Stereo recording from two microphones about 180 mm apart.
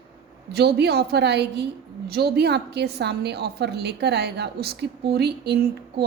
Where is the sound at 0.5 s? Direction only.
65° right (ahead or behind).